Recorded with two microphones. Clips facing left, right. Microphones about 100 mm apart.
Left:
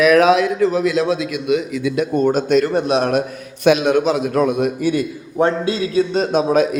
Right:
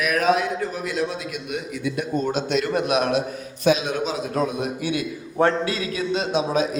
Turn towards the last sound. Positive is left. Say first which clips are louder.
# left 6 dB
turn(degrees=50)  # may be behind; listen again after turning